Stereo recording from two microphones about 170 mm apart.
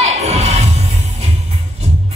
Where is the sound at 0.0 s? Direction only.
40° right (ahead or behind).